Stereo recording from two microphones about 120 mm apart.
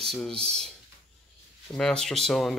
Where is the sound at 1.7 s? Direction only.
5° left (ahead or behind).